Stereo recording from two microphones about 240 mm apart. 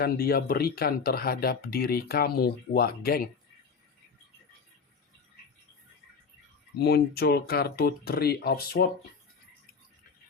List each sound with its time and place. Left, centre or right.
0.0 s speech: left
6.7 s speech: left